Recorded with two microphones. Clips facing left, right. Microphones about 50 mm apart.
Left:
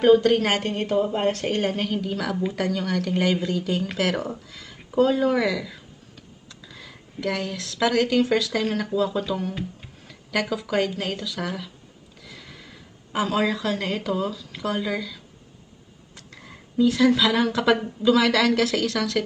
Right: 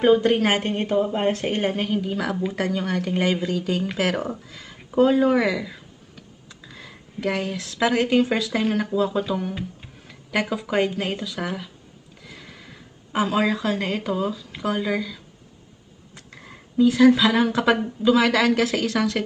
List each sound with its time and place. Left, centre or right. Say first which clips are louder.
0.0 s speech: left 1 dB; centre
10.5 s speech: right 2 dB; right
12.2 s a sound: right 1 dB; right
13.1 s speech: right 2 dB; right
16.7 s speech: right 3 dB; right